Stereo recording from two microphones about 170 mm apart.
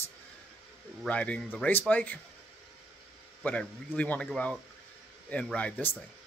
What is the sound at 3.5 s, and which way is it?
Speech, 10° left (ahead or behind).